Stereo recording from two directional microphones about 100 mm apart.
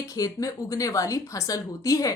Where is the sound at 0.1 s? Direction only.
35° left (ahead or behind).